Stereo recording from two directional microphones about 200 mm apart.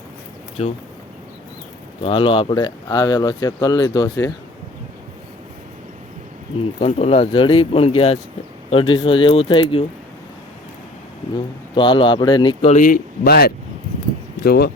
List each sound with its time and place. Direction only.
0.6 s speech: 30° left (ahead or behind)
2.0 s speech: 25° left (ahead or behind)
6.7 s speech: 30° left (ahead or behind)
11.7 s speech: 25° left (ahead or behind)
12.7 s speech: 45° left (ahead or behind)